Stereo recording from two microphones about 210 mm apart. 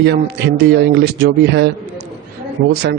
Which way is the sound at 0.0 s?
50° right (ahead or behind).